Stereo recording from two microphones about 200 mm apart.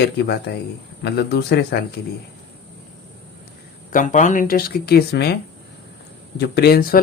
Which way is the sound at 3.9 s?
40° left (ahead or behind).